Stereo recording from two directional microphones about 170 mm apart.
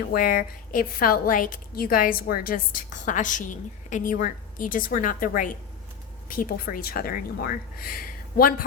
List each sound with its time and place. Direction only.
0.1 s a woman's voice: 55° left (ahead or behind)